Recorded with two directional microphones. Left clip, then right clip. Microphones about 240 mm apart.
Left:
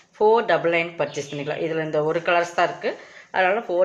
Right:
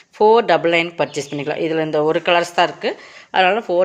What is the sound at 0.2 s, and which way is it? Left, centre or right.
Speech, right.